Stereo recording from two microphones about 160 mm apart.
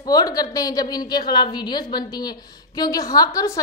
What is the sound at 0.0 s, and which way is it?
A woman's voice, 25° left (ahead or behind).